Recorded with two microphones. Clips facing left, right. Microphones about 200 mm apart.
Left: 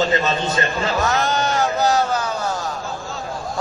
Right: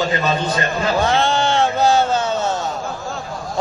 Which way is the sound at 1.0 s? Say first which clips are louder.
Right 3 dB; 30° right (ahead or behind).